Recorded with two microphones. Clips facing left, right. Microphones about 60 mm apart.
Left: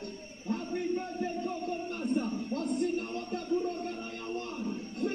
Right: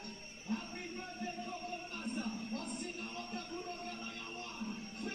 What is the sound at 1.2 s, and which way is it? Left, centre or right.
Music, left.